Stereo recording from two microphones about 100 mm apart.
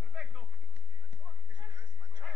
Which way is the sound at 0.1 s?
10° right (ahead or behind).